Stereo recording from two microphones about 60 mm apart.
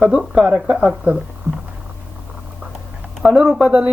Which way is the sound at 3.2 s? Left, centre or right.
Centre.